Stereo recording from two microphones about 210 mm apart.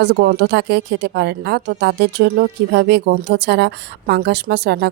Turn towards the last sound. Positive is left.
turn(degrees=-50)  # may be behind; listen again after turning